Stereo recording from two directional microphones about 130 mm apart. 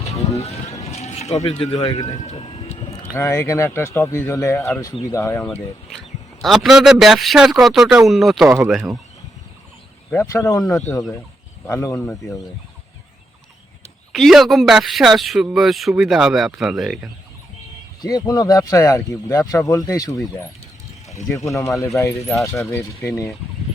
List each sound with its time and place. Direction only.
0.3 s vehicle: 55° left (ahead or behind)
1.7 s speech: 30° left (ahead or behind)
2.2 s vehicle: 50° left (ahead or behind)
3.2 s speech: 25° left (ahead or behind)
6.4 s a man's voice: centre (ahead or behind)
8.4 s speech: 15° right (ahead or behind)
10.3 s speech: 25° left (ahead or behind)
14.1 s a man's voice: centre (ahead or behind)
18.0 s speech: 30° left (ahead or behind)
21.3 s speech: 25° left (ahead or behind)